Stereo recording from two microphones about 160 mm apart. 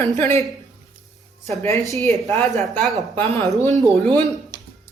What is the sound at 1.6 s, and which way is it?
Speech, 20° left (ahead or behind).